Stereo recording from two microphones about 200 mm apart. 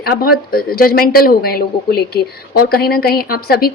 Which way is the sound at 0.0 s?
50° left (ahead or behind).